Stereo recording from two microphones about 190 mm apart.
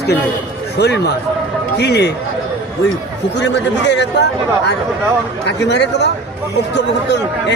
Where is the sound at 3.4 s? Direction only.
65° left (ahead or behind).